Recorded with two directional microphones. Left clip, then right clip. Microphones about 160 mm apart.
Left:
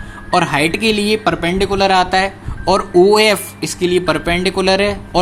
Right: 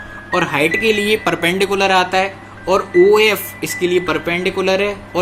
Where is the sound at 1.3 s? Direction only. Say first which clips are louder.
Right 1 dB; 40° left (ahead or behind).